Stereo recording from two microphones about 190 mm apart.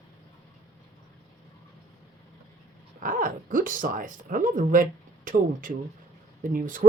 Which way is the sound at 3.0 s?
45° right (ahead or behind).